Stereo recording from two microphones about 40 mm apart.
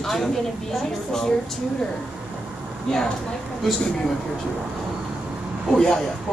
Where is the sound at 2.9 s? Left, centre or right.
Centre.